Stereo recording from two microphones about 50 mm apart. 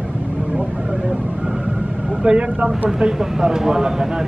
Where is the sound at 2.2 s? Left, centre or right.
Centre.